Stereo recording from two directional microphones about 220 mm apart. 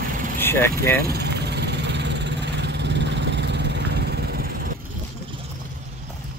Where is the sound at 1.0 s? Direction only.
50° right (ahead or behind).